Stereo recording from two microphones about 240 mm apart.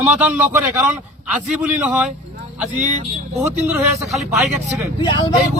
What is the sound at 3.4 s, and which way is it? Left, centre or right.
A man's voice, centre.